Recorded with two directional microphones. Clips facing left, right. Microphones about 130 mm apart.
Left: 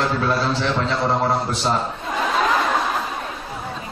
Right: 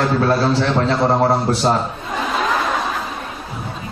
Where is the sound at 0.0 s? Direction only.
40° right (ahead or behind).